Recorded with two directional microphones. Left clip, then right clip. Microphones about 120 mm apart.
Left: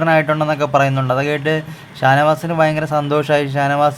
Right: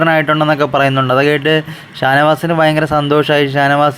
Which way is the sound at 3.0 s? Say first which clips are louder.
Right 3 dB; 25° right (ahead or behind).